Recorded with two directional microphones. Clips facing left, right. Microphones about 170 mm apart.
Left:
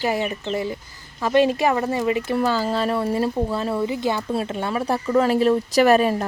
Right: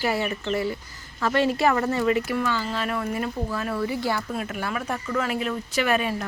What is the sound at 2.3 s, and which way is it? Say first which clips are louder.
Speech: left 5 dB; 35° left (ahead or behind).